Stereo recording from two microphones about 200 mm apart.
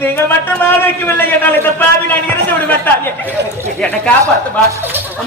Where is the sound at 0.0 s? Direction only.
10° left (ahead or behind).